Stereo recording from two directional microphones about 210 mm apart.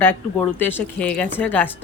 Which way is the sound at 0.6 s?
10° left (ahead or behind).